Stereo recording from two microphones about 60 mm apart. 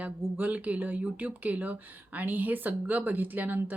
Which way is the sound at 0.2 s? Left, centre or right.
Right.